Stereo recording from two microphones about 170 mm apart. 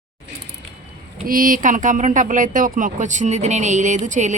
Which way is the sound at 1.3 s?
55° right (ahead or behind).